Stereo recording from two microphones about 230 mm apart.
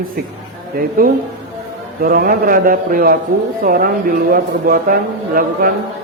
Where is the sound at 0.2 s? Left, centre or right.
Right.